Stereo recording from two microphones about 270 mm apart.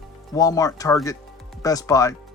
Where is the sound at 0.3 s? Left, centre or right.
Centre.